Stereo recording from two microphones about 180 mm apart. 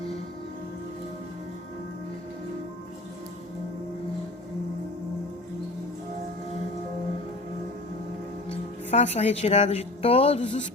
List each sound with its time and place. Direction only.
8.4 s a woman's voice: 35° left (ahead or behind)